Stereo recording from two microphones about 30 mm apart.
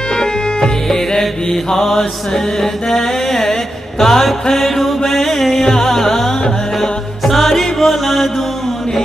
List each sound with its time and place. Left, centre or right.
0.1 s music: left
0.8 s mantra: centre
4.0 s music: centre